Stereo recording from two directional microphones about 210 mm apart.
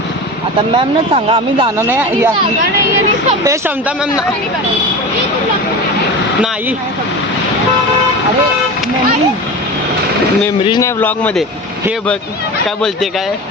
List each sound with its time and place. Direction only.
0.7 s speech: 25° right (ahead or behind)
1.9 s speech: 10° right (ahead or behind)
3.4 s speech: 15° right (ahead or behind)
10.6 s speech: 20° left (ahead or behind)